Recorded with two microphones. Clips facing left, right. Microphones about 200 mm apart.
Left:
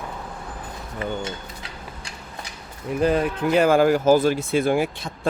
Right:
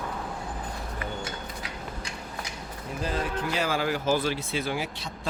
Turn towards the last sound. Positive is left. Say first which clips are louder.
# left 9 dB
turn(degrees=50)  # may be behind; listen again after turning